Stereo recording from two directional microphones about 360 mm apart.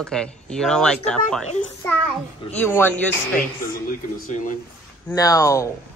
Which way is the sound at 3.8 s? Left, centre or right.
Left.